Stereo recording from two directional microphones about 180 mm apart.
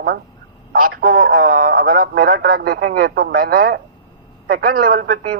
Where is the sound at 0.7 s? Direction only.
50° right (ahead or behind).